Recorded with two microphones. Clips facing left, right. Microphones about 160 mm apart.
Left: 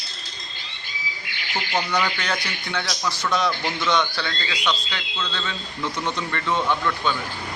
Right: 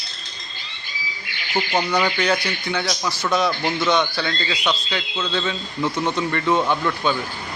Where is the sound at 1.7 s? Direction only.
20° right (ahead or behind).